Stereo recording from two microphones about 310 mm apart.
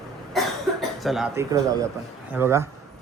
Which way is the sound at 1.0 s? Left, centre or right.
Centre.